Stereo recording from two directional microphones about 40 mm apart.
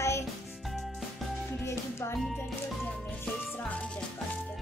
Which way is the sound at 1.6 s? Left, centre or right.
Left.